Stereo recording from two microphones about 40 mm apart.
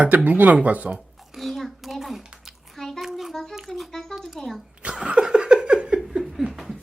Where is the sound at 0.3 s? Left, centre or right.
Right.